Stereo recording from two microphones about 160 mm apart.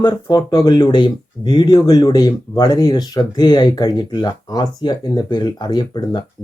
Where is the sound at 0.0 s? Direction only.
25° left (ahead or behind).